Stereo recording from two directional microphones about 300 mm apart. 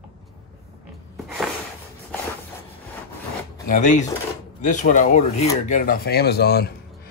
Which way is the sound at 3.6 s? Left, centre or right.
Left.